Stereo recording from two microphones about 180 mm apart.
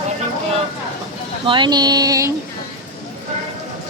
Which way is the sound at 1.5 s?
25° right (ahead or behind).